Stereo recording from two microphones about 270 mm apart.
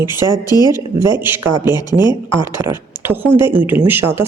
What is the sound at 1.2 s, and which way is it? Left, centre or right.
Speech, centre.